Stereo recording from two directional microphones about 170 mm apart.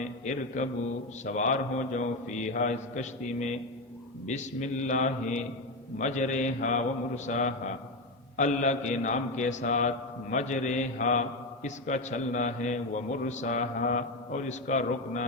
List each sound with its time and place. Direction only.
0.3 s a man's voice: 45° left (ahead or behind)